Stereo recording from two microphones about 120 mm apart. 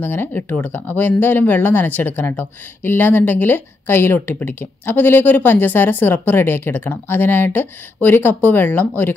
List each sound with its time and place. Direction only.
0.0 s speech: 15° left (ahead or behind)